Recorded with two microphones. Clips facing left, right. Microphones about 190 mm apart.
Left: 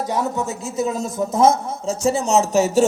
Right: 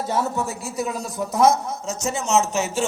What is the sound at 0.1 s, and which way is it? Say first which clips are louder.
Speech: right 1 dB; 20° left (ahead or behind).